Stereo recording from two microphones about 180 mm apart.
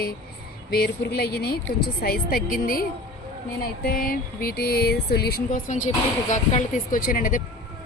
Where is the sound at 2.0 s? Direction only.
55° left (ahead or behind).